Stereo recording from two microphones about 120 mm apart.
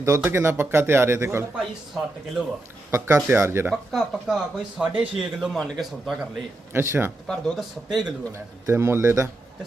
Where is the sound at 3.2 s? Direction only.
20° right (ahead or behind).